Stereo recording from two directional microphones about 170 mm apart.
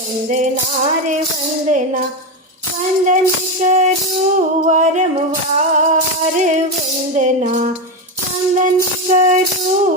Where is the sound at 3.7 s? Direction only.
45° right (ahead or behind).